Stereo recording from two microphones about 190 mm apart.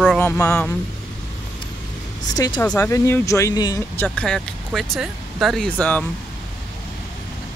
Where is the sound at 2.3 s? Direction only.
20° left (ahead or behind).